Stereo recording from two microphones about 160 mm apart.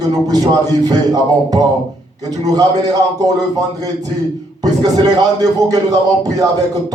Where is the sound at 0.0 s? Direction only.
25° right (ahead or behind).